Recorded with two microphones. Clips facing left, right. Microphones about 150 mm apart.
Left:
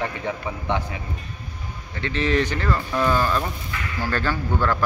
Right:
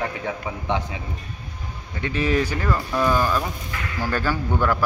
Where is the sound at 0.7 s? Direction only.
20° right (ahead or behind).